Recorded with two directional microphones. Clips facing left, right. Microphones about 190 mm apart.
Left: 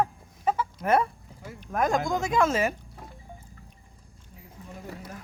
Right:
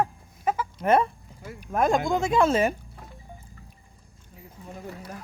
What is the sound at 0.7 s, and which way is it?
Speech, 25° right (ahead or behind).